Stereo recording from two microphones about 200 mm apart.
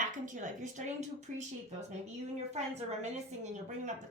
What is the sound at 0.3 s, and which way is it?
Speech, 40° right (ahead or behind).